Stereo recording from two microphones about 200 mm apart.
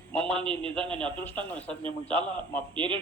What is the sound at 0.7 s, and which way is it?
A man's voice, 5° left (ahead or behind).